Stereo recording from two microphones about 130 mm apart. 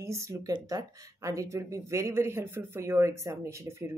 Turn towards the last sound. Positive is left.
turn(degrees=-20)  # may be behind; listen again after turning